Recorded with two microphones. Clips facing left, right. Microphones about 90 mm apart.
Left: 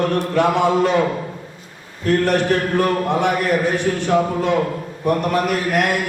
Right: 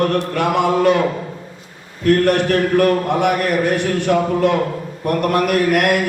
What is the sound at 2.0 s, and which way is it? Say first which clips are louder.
A man's voice: right 2 dB; 60° right (ahead or behind).